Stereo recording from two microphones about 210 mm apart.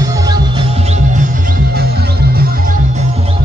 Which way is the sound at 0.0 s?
15° right (ahead or behind).